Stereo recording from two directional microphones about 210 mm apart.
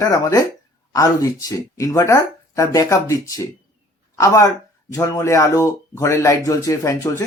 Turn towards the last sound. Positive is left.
turn(degrees=15)  # may be behind; listen again after turning